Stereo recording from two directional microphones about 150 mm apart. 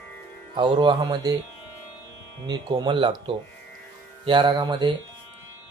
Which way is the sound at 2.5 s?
30° right (ahead or behind).